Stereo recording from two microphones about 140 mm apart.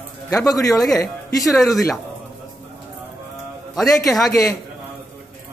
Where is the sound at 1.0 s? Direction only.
20° left (ahead or behind).